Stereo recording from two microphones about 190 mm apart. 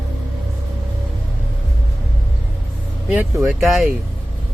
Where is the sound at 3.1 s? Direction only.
5° right (ahead or behind).